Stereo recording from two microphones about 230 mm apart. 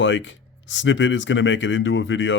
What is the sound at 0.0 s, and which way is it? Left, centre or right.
Speech, left.